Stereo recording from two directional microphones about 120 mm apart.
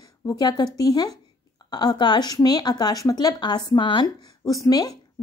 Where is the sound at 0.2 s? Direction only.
30° left (ahead or behind).